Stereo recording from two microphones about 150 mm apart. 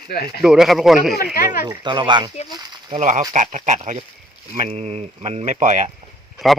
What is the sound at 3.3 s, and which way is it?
Speech, 55° right (ahead or behind).